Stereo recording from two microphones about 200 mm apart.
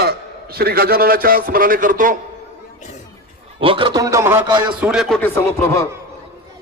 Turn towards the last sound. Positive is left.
turn(degrees=15)  # may be behind; listen again after turning